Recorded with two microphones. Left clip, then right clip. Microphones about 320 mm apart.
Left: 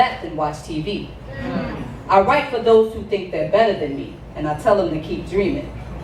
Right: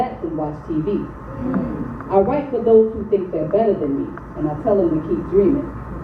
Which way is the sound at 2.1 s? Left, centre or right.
Left.